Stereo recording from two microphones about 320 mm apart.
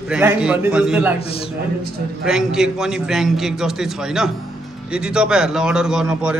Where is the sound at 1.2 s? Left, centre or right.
Centre.